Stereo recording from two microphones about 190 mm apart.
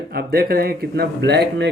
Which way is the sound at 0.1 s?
55° right (ahead or behind).